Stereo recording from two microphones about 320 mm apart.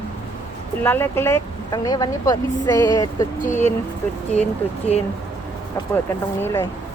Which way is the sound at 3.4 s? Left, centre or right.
Left.